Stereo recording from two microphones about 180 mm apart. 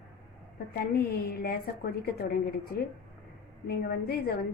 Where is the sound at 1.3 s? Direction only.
60° left (ahead or behind).